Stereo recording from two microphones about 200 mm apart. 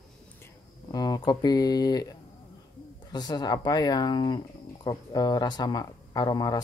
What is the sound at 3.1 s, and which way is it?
Speech, 20° left (ahead or behind).